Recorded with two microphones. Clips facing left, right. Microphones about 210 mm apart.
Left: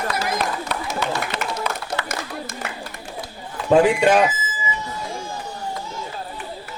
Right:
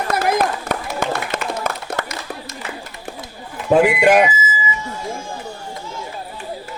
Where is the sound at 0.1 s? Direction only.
50° right (ahead or behind).